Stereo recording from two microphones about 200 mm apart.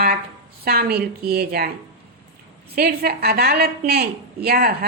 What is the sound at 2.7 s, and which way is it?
A woman's voice, 50° right (ahead or behind).